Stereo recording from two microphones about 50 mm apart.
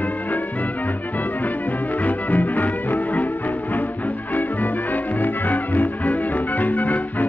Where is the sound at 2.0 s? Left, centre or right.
Left.